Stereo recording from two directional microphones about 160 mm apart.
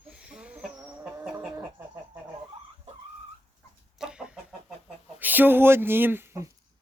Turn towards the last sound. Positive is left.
turn(degrees=-15)  # may be behind; listen again after turning